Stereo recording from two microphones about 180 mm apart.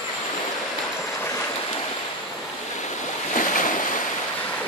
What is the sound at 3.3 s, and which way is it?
Boat, 45° left (ahead or behind).